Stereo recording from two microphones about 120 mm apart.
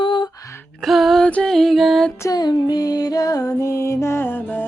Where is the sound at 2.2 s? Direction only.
35° left (ahead or behind).